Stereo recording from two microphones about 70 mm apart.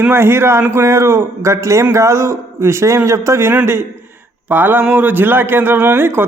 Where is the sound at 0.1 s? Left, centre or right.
Right.